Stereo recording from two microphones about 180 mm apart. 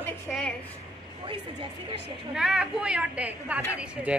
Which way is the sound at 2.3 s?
5° right (ahead or behind).